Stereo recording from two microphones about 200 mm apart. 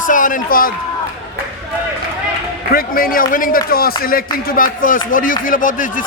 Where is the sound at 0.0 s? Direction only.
40° left (ahead or behind).